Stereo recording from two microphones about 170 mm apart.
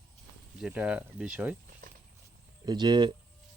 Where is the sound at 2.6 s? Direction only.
25° right (ahead or behind).